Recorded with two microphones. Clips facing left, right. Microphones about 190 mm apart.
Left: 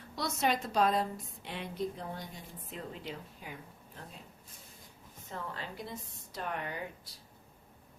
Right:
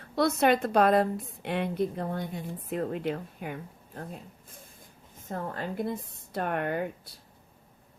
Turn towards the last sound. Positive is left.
turn(degrees=-55)  # may be behind; listen again after turning